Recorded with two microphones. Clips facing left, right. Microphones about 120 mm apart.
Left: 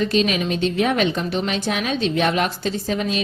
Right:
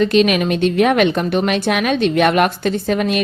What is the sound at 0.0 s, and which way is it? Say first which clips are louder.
A woman's voice: right 6 dB; 70° right (ahead or behind).